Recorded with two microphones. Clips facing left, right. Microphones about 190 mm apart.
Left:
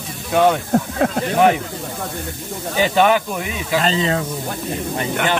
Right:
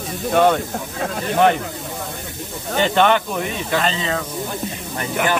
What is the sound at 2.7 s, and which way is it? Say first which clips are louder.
Speech: left 1 dB; 5° left (ahead or behind).